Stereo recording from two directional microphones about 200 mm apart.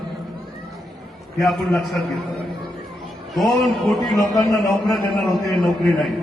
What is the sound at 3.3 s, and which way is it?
A man's voice, centre (ahead or behind).